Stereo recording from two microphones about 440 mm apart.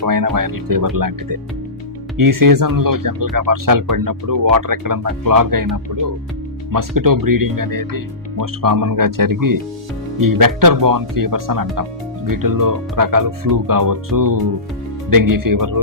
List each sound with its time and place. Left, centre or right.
0.0 s speech: right